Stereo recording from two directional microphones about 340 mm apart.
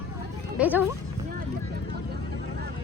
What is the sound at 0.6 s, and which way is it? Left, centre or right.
Speech, centre.